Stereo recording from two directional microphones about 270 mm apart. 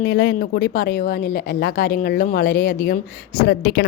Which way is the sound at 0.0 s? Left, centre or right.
Left.